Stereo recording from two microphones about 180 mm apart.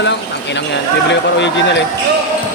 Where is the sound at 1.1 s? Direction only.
80° left.